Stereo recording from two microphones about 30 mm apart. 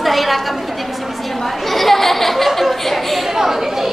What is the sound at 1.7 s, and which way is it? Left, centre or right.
Chatter, centre.